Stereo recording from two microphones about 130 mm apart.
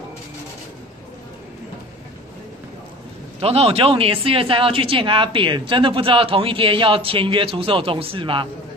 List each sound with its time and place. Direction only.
3.3 s speech: 50° right (ahead or behind)